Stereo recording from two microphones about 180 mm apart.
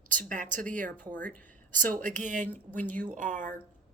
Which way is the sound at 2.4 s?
10° left (ahead or behind).